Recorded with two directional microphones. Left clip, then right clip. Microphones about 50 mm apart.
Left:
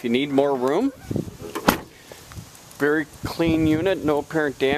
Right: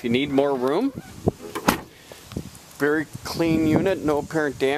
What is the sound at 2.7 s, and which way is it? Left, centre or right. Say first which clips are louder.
Speech: left 1 dB; centre.